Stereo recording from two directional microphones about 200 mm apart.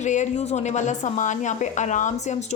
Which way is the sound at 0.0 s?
35° left (ahead or behind).